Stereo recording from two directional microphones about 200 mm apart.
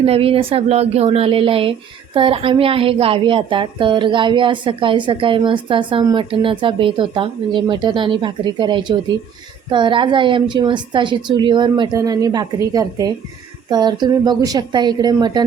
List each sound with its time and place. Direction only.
0.0 s a woman's voice: 30° right (ahead or behind)